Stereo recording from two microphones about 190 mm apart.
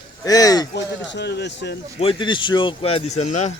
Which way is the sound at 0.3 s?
20° left (ahead or behind).